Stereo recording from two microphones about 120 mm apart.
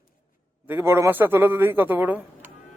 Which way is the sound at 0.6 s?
20° right (ahead or behind).